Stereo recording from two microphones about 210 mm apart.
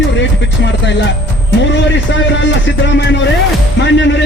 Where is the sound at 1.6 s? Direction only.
60° left (ahead or behind).